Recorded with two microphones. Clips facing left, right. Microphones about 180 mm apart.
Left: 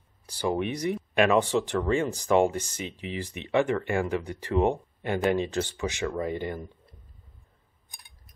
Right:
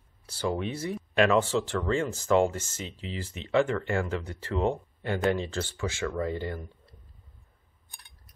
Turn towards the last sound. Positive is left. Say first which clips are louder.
# left 1 dB
turn(degrees=15)  # may be behind; listen again after turning